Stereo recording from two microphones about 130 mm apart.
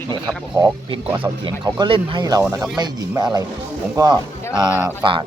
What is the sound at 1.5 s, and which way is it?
Speech, 35° right (ahead or behind).